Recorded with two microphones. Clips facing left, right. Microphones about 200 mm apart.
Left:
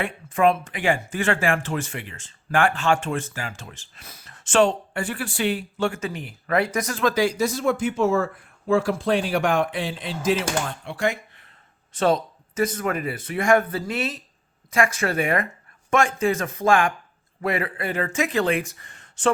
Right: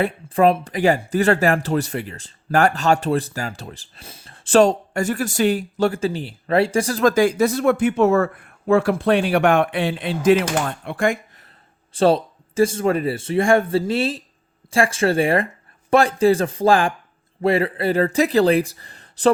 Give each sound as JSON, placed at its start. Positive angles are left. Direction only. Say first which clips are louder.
{"t": 0.0, "sound": "speech", "louder": "right 4 dB", "side_deg": -35}
{"t": 7.0, "sound": "speech", "louder": "right 5 dB", "side_deg": -50}
{"t": 11.9, "sound": "speech", "louder": "right 5 dB", "side_deg": -30}